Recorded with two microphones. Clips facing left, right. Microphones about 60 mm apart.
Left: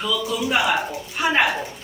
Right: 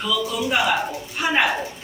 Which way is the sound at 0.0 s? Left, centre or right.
Centre.